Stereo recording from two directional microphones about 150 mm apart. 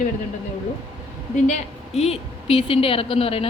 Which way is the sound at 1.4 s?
50° left (ahead or behind).